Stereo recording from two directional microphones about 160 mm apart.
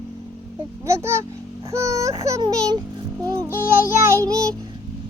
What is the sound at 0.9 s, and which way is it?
A child's voice, 15° right (ahead or behind).